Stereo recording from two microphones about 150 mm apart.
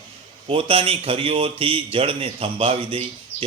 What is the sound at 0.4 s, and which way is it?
Speech, 40° right (ahead or behind).